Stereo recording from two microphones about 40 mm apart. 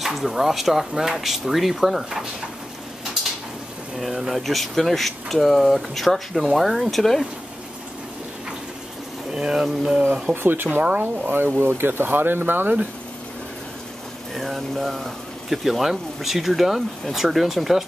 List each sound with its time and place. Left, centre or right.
0.0 s speech: centre
4.3 s speech: centre
9.3 s speech: centre
10.3 s speech: right
12.1 s speech: right
14.3 s speech: centre